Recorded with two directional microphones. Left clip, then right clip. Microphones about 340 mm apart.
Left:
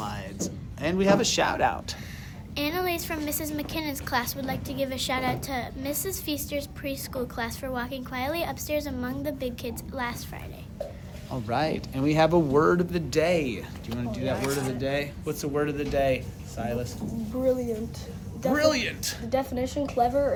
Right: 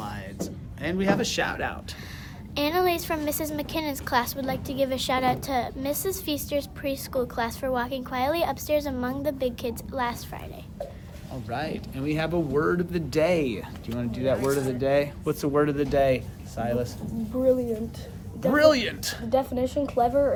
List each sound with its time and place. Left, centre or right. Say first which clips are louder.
0.0 s a sound: left 1 dB; centre
2.6 s a woman's voice: right 4 dB; centre
11.4 s speech: left 4 dB; centre
13.1 s a woman's voice: right 2 dB; centre; by 16.9 s right
18.5 s speech: right 5 dB; right
19.3 s a woman's voice: right 3 dB; centre